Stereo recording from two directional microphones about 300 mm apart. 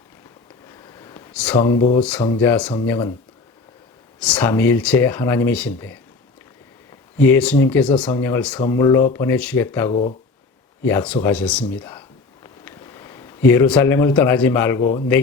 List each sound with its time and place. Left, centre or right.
0.7 s a sound: centre
2.0 s speech: centre
4.2 s speech: centre
7.2 s speech: centre
9.9 s speech: left
10.8 s speech: centre